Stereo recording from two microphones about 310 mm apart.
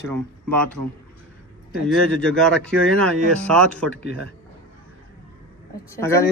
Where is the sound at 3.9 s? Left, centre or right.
Right.